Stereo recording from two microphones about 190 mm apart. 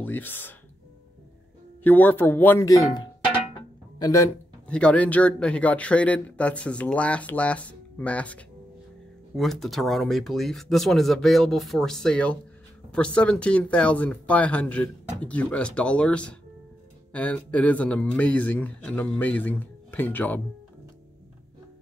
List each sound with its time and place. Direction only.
0.0 s speech: 10° left (ahead or behind)
1.8 s speech: 10° left (ahead or behind)